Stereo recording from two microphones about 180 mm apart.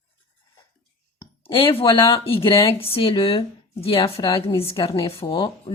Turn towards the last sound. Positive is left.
turn(degrees=30)  # may be behind; listen again after turning